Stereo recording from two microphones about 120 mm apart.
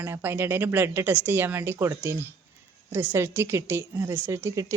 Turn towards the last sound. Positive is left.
turn(degrees=-20)  # may be behind; listen again after turning